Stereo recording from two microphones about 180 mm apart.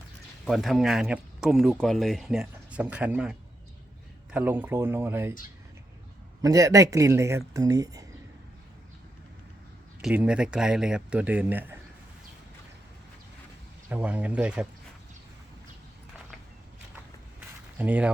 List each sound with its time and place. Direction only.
0.4 s speech: centre (ahead or behind)
6.4 s speech: 20° right (ahead or behind)
10.0 s speech: 5° right (ahead or behind)
13.9 s speech: 10° right (ahead or behind)
17.7 s speech: 10° right (ahead or behind)